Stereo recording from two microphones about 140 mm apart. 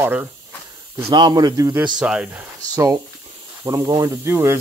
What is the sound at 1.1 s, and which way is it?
Speech, 30° right (ahead or behind).